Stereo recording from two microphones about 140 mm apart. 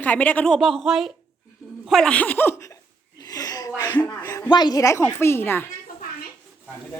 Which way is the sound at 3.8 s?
15° left (ahead or behind).